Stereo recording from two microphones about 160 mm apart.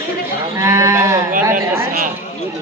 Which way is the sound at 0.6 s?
20° right (ahead or behind).